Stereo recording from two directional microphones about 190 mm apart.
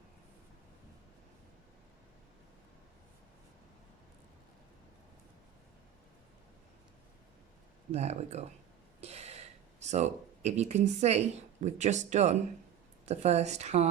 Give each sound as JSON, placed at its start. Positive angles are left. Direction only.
{"t": 7.9, "sound": "a woman's voice", "side_deg": -35}